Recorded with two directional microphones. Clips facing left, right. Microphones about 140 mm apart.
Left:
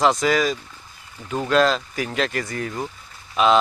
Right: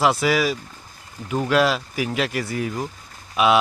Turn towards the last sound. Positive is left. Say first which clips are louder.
# left 1 dB
turn(degrees=-10)  # may be behind; listen again after turning